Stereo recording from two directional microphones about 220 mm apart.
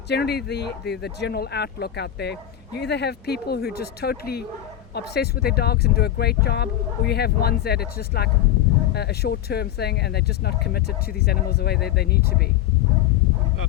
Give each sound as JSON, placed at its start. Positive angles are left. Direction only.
{"t": 0.1, "sound": "speech", "side_deg": 45}